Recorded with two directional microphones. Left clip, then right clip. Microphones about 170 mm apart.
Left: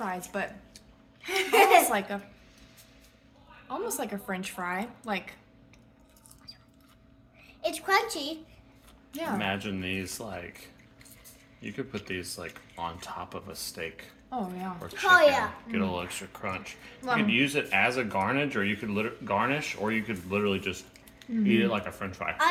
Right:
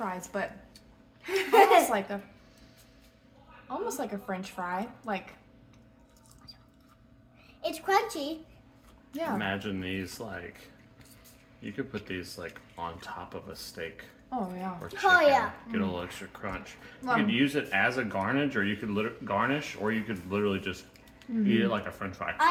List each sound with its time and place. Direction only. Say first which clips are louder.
0.3 s a woman's voice: right 1 dB; 10° right (ahead or behind)
1.2 s speech: right 1 dB; 40° right (ahead or behind)
1.9 s a woman's voice: left 1 dB; 5° right (ahead or behind)
3.7 s a woman's voice: even; centre (ahead or behind)
7.6 s a child's voice: left 1 dB; 30° right (ahead or behind)
9.4 s speech: left 1 dB; 20° left (ahead or behind)
11.6 s speech: even; 20° left (ahead or behind)
14.3 s a woman's voice: even; 15° right (ahead or behind)
15.0 s a child's voice: left 1 dB; 50° right (ahead or behind)
15.7 s speech: left 2 dB; 20° left (ahead or behind)